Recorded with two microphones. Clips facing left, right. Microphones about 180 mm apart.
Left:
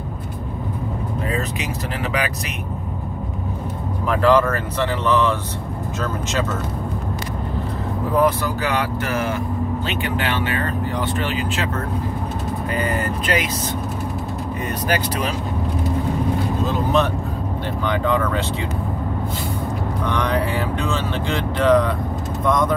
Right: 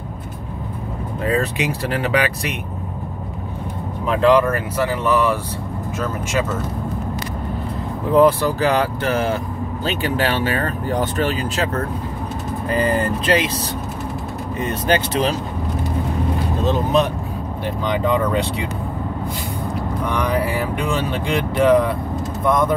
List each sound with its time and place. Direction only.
1.3 s speech: 35° right (ahead or behind)
4.1 s speech: 20° right (ahead or behind)
8.2 s speech: 30° right (ahead or behind)
14.6 s speech: 25° right (ahead or behind)
16.6 s vehicle: 15° right (ahead or behind)
17.8 s speech: 15° right (ahead or behind)
20.1 s speech: 5° right (ahead or behind)